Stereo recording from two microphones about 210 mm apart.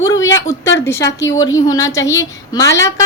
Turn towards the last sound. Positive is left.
turn(degrees=15)  # may be behind; listen again after turning